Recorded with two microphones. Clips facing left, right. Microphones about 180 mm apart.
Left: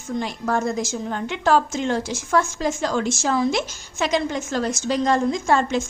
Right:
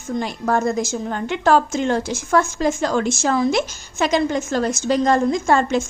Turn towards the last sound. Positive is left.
turn(degrees=-50)  # may be behind; listen again after turning